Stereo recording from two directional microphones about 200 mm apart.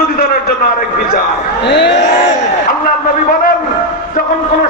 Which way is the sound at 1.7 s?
60° left (ahead or behind).